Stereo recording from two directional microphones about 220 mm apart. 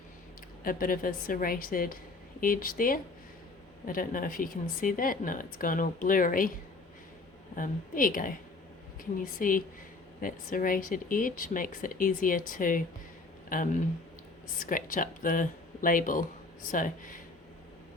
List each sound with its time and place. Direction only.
0.6 s a woman's voice: 40° left (ahead or behind)
7.5 s a woman's voice: 40° left (ahead or behind)
14.6 s a woman's voice: 40° left (ahead or behind)